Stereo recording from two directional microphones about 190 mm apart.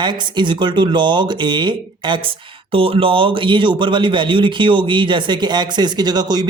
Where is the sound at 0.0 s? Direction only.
25° right (ahead or behind).